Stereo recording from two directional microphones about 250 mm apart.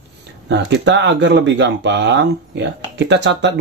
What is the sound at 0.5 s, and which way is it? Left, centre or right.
Speech, right.